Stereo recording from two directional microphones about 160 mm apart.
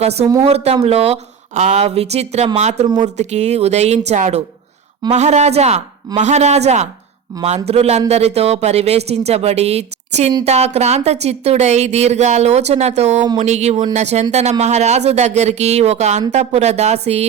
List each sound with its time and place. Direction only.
0.0 s speech: 40° right (ahead or behind)